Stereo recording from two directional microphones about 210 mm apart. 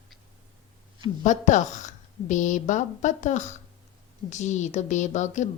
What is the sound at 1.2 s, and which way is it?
Speech, 35° left (ahead or behind).